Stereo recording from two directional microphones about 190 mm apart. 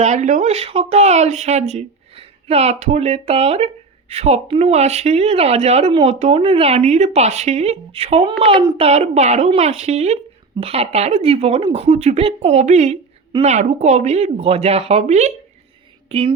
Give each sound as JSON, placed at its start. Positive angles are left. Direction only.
{"t": 0.0, "sound": "speech", "side_deg": -40}